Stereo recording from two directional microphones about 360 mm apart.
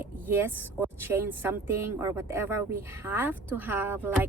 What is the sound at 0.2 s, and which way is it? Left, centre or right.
Speech, centre.